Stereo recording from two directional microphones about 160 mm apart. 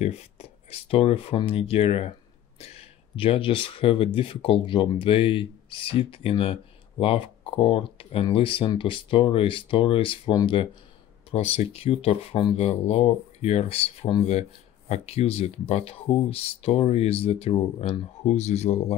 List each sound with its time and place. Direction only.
0.0 s speech: 40° left (ahead or behind)